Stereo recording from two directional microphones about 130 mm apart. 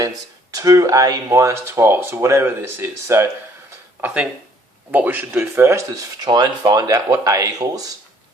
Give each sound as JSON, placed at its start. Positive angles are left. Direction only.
{"t": 0.5, "sound": "speech", "side_deg": -25}
{"t": 6.2, "sound": "speech", "side_deg": -30}